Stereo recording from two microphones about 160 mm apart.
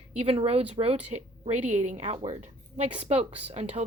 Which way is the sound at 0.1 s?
40° right (ahead or behind).